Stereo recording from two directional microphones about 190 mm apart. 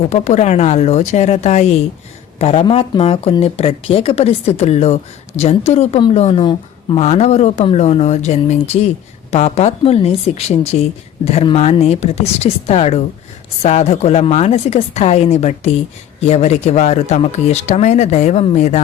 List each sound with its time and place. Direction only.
0.1 s a woman's voice: 35° left (ahead or behind)